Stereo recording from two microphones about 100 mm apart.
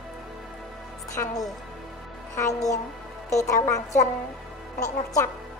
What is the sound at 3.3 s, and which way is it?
Speech, 35° left (ahead or behind).